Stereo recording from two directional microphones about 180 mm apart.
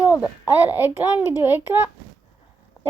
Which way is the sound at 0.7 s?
10° right (ahead or behind).